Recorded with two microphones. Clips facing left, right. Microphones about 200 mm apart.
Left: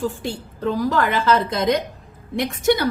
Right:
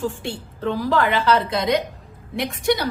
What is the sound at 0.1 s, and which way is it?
A woman's voice, 40° left (ahead or behind).